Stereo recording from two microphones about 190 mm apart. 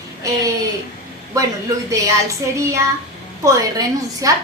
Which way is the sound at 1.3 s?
15° right (ahead or behind).